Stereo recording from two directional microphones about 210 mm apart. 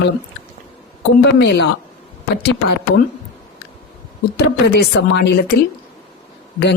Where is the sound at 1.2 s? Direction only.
55° left (ahead or behind).